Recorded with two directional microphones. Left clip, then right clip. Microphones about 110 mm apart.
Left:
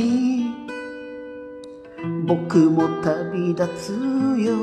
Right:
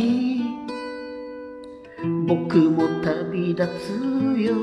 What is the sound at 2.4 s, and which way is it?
Music, 20° left (ahead or behind).